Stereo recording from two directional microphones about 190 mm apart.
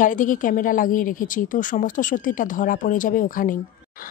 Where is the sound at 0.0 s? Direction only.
45° left (ahead or behind).